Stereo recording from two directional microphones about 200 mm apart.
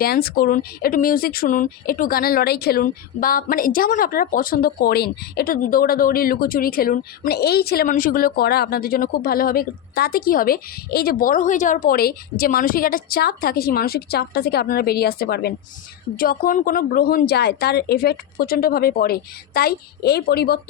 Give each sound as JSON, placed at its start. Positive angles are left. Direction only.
{"t": 0.0, "sound": "speech", "side_deg": 50}